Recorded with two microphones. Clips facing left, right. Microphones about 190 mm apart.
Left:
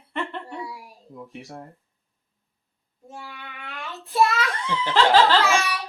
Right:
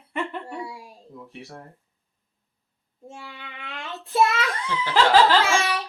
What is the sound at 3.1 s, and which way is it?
A child's voice, 25° right (ahead or behind).